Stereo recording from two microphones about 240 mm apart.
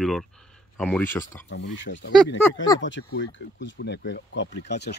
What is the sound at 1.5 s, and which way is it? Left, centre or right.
Speech, left.